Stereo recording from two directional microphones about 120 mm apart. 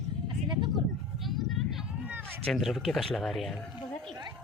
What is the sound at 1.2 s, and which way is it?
Vehicle, centre (ahead or behind).